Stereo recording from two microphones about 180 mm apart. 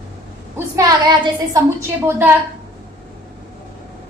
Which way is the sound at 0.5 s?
20° right (ahead or behind).